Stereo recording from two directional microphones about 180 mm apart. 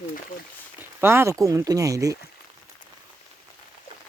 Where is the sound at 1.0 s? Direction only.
15° right (ahead or behind).